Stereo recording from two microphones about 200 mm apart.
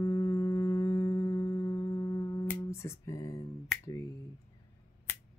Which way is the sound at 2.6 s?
15° left (ahead or behind).